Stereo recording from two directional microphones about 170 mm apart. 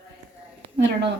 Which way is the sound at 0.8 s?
90° right.